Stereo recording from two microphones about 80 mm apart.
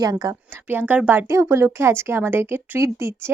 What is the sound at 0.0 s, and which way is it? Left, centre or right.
Speech, right.